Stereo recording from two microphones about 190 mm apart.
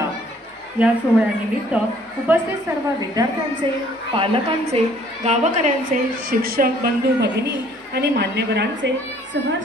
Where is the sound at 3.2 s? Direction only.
20° right (ahead or behind).